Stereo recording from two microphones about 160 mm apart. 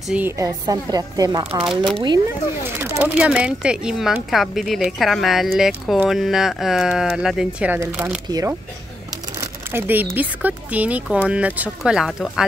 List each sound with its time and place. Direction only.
0.1 s speech: 10° right (ahead or behind)
0.7 s a woman's voice: 25° right (ahead or behind)
1.4 s speech: 35° right (ahead or behind)
2.8 s a woman's voice: 10° right (ahead or behind)